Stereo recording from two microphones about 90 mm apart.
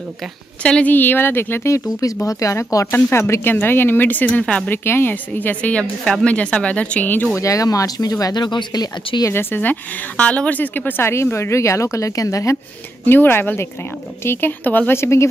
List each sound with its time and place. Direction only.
0.6 s a woman's voice: 10° left (ahead or behind)
4.8 s a woman's voice: 25° left (ahead or behind)
7.3 s speech: 35° left (ahead or behind); by 9.2 s 55° left (ahead or behind)
9.3 s a woman's voice: 25° left (ahead or behind)
13.0 s a woman's voice: 20° left (ahead or behind)